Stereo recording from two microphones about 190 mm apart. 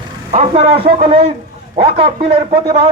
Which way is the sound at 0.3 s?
30° right (ahead or behind).